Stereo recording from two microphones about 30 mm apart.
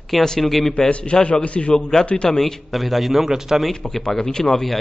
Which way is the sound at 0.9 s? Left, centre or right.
Left.